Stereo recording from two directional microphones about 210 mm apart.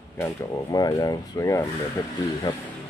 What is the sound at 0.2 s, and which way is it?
Speech, 15° left (ahead or behind).